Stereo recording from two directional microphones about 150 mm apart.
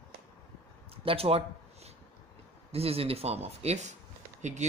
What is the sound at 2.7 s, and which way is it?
Speech, 40° right (ahead or behind).